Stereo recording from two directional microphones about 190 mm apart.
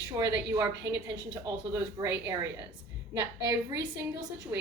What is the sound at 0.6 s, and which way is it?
Speech, 20° right (ahead or behind).